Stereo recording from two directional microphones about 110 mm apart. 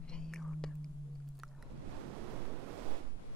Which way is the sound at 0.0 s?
5° left (ahead or behind).